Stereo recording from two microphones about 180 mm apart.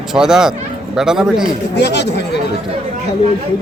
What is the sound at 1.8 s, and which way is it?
Speech, 70° left (ahead or behind).